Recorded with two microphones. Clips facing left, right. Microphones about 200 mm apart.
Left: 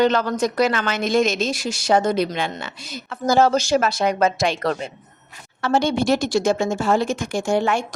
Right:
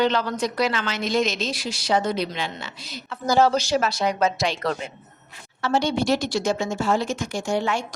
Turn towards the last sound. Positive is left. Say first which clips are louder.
# left 4 dB
turn(degrees=55)  # may be behind; listen again after turning